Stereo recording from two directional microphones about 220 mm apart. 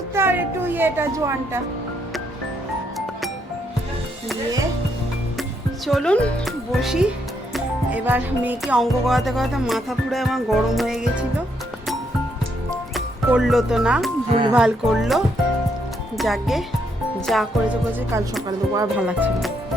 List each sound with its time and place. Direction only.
0.1 s speech: 10° right (ahead or behind)
5.4 s speech: centre (ahead or behind)
7.5 s music: 5° right (ahead or behind)
12.9 s speech: centre (ahead or behind)
14.3 s speech: 25° right (ahead or behind)
14.5 s music: centre (ahead or behind)
18.4 s speech: 15° right (ahead or behind)
18.9 s music: 5° right (ahead or behind)